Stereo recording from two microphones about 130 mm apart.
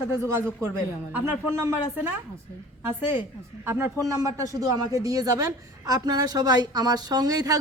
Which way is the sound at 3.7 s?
20° right (ahead or behind).